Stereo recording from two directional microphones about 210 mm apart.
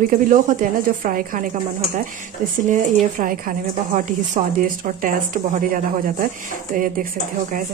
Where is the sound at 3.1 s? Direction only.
40° right (ahead or behind).